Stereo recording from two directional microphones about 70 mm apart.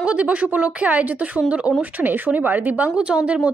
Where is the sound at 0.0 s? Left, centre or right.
Centre.